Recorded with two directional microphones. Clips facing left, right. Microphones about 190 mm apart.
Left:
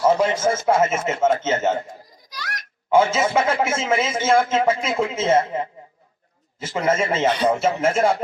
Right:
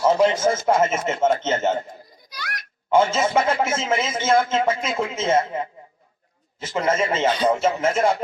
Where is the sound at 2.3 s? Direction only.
40° left (ahead or behind).